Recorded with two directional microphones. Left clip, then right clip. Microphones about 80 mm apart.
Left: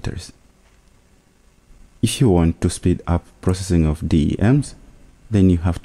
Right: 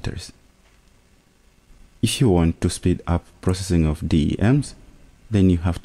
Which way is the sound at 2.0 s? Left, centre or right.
Right.